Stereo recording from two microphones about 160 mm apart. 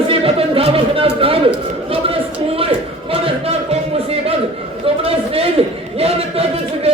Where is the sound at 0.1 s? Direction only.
35° right (ahead or behind).